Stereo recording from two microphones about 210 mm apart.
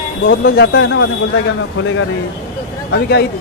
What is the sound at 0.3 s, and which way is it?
Speech, 50° left (ahead or behind).